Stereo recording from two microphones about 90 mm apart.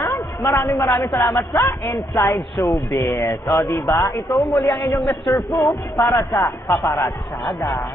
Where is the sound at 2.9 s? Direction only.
25° left (ahead or behind).